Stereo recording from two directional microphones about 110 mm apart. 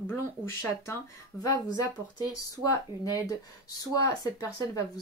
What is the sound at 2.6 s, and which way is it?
Speech, 30° left (ahead or behind).